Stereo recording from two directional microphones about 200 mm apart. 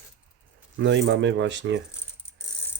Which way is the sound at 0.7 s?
65° right (ahead or behind).